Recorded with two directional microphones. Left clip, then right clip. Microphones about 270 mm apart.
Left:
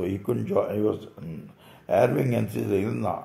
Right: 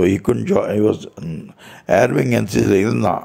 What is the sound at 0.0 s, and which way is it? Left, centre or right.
Speech, right.